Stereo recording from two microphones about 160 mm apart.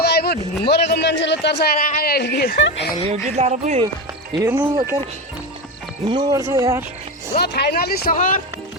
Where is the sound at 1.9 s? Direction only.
70° left (ahead or behind).